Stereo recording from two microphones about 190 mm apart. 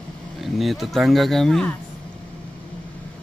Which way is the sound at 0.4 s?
Centre (ahead or behind).